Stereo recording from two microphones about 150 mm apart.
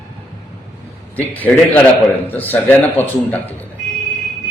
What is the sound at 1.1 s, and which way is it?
Speech, 10° left (ahead or behind).